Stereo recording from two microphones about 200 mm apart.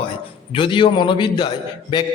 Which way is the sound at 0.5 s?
25° left (ahead or behind).